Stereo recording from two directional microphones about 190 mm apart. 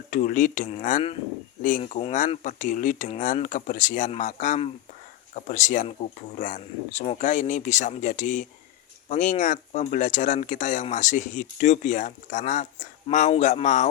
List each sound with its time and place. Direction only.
0.1 s speech: 45° left (ahead or behind)
1.8 s speech: 30° left (ahead or behind)